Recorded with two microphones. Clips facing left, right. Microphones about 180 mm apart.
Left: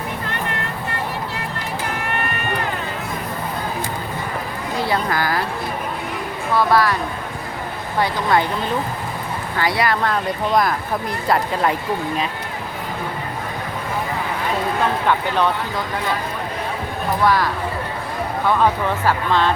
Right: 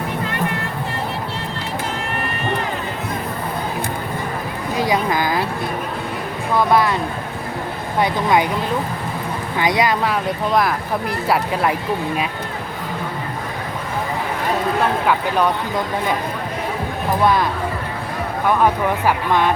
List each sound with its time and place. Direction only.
4.8 s speech: 15° right (ahead or behind)
6.6 s speech: 20° right (ahead or behind)
9.6 s speech: 20° right (ahead or behind); by 10.8 s 5° right (ahead or behind)
15.0 s speech: 10° right (ahead or behind)
17.2 s speech: 20° right (ahead or behind)